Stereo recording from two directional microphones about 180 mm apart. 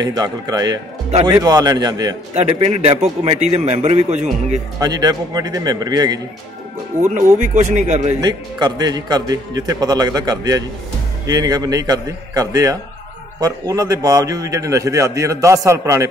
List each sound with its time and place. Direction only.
0.0 s a man's voice: 20° right (ahead or behind)
2.3 s a man's voice: 35° right (ahead or behind)
4.7 s a man's voice: 20° right (ahead or behind)
7.3 s a man's voice: 40° right (ahead or behind)
8.2 s a man's voice: 20° right (ahead or behind)